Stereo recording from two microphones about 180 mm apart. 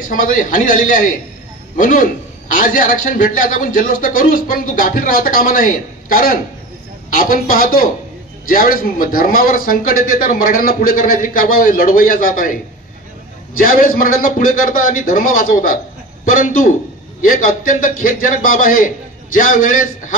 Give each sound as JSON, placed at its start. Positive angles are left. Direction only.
{"t": 0.0, "sound": "a man's voice", "side_deg": 50}
{"t": 13.6, "sound": "a man's voice", "side_deg": 50}